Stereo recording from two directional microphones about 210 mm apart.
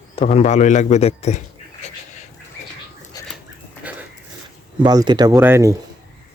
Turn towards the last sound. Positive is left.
turn(degrees=-15)  # may be behind; listen again after turning